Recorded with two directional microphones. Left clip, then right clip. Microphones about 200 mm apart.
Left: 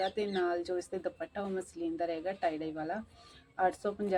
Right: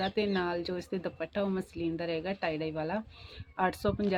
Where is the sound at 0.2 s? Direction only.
45° right (ahead or behind).